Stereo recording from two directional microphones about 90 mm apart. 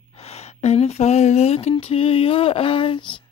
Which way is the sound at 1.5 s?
90° left.